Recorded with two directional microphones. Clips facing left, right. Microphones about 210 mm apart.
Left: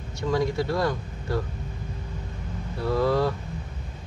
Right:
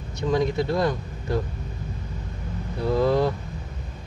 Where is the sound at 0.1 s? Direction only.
20° right (ahead or behind).